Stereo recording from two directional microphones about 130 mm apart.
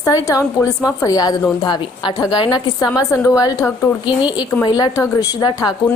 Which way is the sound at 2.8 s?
20° left (ahead or behind).